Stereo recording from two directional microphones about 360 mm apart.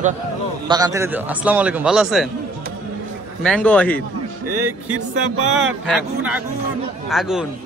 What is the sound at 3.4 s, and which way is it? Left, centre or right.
Speech, centre.